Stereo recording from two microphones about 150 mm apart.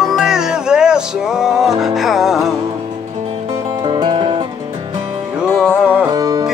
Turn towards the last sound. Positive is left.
turn(degrees=-25)  # may be behind; listen again after turning